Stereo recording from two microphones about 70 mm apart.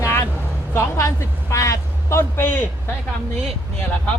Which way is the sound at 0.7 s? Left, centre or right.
Left.